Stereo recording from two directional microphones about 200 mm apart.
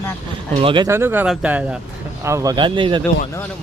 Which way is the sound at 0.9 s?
10° right (ahead or behind).